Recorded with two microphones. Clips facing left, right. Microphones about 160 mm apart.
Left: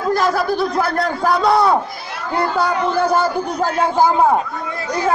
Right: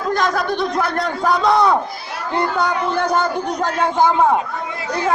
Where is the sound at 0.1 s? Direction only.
5° left (ahead or behind).